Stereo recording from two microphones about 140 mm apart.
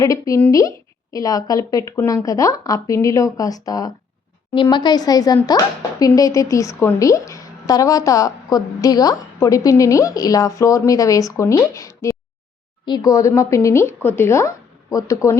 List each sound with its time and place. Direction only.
0.0 s speech: 25° left (ahead or behind)